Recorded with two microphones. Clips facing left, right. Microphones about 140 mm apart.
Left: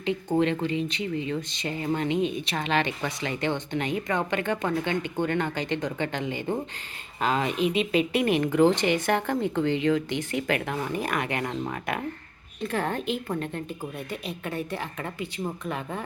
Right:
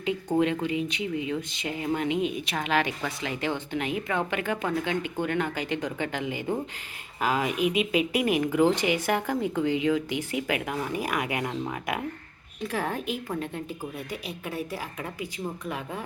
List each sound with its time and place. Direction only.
0.0 s speech: 10° right (ahead or behind)